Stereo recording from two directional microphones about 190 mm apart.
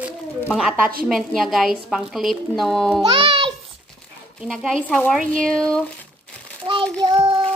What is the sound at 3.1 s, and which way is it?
Speech, 30° right (ahead or behind).